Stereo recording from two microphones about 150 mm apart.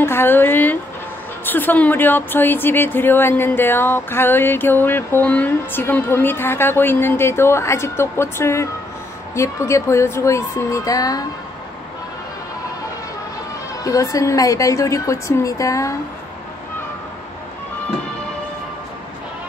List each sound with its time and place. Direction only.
0.0 s a woman's voice: 15° left (ahead or behind)
13.8 s a woman's voice: 25° left (ahead or behind)